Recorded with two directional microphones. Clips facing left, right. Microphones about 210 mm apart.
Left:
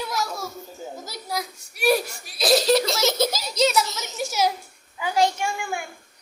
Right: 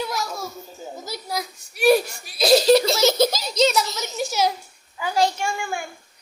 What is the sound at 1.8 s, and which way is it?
Giggle, centre (ahead or behind).